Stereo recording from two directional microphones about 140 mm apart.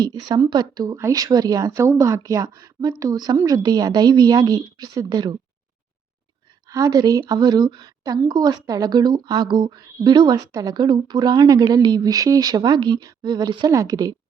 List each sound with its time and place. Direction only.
0.0 s a woman's voice: 30° right (ahead or behind)
6.7 s a woman's voice: 25° right (ahead or behind)